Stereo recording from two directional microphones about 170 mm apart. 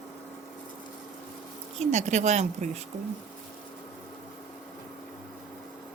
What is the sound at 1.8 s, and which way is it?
Speech, 40° right (ahead or behind).